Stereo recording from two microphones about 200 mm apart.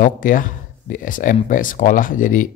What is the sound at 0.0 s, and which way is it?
A man's voice, 45° left (ahead or behind).